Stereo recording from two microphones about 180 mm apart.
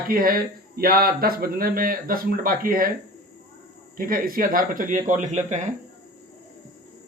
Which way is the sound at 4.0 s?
50° right (ahead or behind).